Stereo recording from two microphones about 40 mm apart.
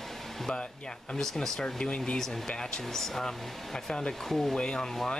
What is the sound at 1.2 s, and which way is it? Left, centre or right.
Speech, centre.